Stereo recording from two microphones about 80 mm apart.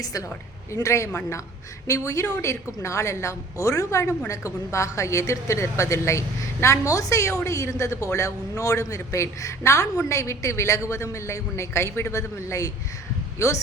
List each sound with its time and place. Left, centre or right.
0.0 s a woman's voice: left